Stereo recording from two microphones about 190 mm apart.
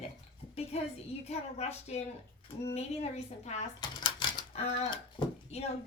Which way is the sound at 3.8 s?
25° left (ahead or behind).